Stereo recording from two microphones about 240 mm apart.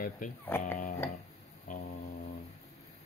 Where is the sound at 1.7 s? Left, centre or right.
Left.